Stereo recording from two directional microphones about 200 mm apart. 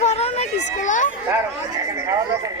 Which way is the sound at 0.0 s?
30° left (ahead or behind).